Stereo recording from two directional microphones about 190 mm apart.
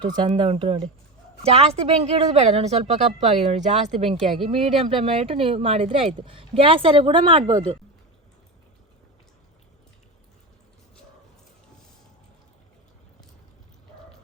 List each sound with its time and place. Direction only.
0.0 s a woman's voice: 25° right (ahead or behind)